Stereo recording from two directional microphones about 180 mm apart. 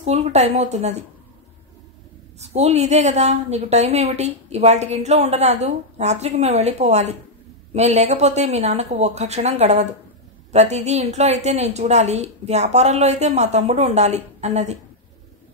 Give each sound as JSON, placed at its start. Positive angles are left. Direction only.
{"t": 0.0, "sound": "a woman's voice", "side_deg": -40}
{"t": 2.4, "sound": "a woman's voice", "side_deg": -35}